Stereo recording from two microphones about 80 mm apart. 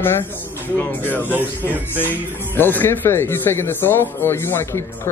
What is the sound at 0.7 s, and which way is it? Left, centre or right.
Speech, left.